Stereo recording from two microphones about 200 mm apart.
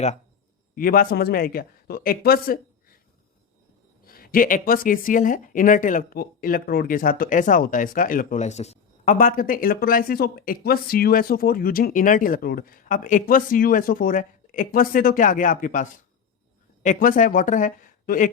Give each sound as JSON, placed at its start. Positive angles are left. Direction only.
{"t": 0.8, "sound": "speech", "side_deg": 45}
{"t": 4.0, "sound": "speech", "side_deg": 45}